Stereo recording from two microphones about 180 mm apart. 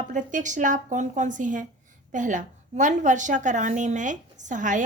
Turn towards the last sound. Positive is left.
turn(degrees=-45)  # may be behind; listen again after turning